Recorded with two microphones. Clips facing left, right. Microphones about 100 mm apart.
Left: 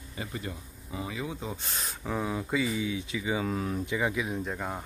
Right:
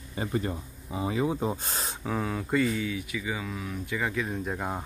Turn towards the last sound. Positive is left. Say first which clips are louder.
# right 2 dB
turn(degrees=-10)  # may be behind; listen again after turning